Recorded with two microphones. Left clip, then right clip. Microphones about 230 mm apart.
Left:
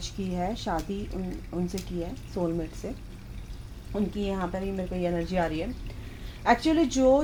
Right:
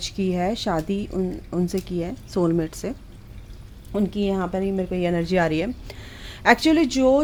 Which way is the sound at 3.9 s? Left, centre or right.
Right.